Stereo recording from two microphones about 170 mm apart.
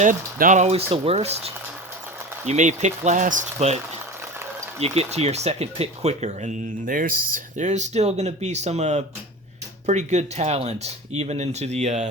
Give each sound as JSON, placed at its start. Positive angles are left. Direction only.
{"t": 0.0, "sound": "speech", "side_deg": -50}
{"t": 4.8, "sound": "speech", "side_deg": -40}